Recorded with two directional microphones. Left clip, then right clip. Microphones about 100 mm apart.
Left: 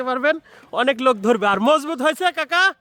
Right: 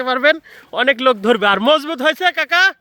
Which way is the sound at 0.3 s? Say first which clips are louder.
Right 3 dB; 5° left (ahead or behind).